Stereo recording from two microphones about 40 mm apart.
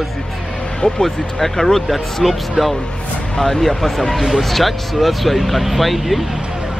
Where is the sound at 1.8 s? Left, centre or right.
Centre.